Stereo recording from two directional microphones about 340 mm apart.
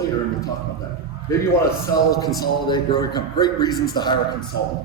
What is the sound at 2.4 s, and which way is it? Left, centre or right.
Speech, centre.